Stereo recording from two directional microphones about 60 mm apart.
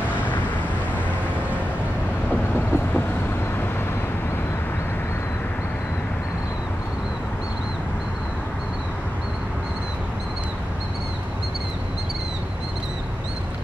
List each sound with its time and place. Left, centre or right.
2.5 s vehicle: left